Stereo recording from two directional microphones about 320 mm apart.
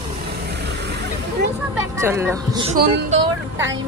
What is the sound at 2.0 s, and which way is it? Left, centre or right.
Speech, centre.